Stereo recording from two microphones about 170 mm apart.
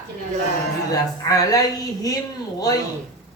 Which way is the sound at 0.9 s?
20° left (ahead or behind).